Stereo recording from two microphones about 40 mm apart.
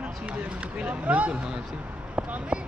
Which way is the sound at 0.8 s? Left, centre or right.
Right.